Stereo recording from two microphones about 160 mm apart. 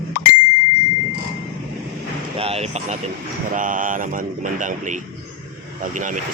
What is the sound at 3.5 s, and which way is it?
Speech, 55° right (ahead or behind).